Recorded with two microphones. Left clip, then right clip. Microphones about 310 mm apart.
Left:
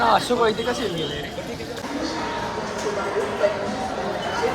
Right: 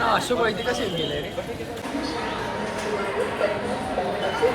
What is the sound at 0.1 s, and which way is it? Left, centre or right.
Speech, left.